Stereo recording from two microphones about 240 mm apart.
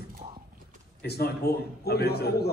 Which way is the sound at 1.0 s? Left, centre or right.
Left.